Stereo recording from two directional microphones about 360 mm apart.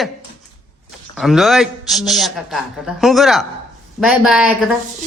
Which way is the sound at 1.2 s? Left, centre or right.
Centre.